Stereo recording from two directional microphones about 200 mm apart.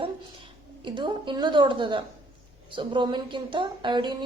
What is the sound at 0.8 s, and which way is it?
A woman's voice, 25° right (ahead or behind).